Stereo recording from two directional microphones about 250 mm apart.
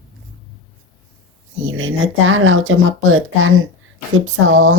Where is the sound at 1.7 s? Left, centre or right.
Right.